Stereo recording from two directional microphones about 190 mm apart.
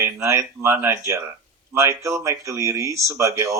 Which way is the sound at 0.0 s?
15° right (ahead or behind).